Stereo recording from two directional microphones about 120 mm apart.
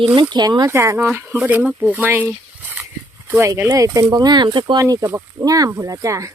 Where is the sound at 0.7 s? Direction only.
20° right (ahead or behind).